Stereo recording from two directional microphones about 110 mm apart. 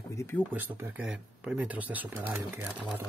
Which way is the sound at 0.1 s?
25° left (ahead or behind).